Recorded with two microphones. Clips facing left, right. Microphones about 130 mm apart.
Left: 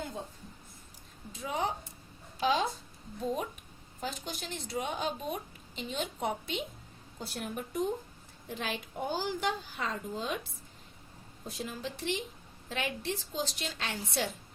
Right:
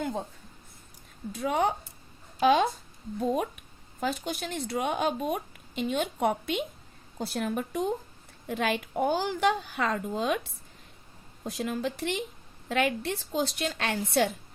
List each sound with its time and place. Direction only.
1.3 s a woman's voice: 70° right (ahead or behind)
7.2 s a woman's voice: 85° right
8.4 s a woman's voice: 70° right (ahead or behind)
11.4 s a woman's voice: 80° right; by 14.3 s 60° right (ahead or behind)